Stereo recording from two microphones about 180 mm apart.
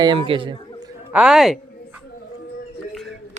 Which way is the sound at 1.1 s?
5° right (ahead or behind).